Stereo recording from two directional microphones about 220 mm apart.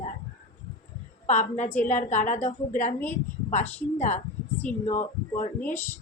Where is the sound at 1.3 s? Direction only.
35° left (ahead or behind).